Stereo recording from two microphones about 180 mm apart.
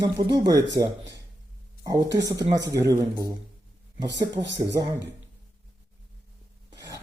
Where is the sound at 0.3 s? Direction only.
20° right (ahead or behind).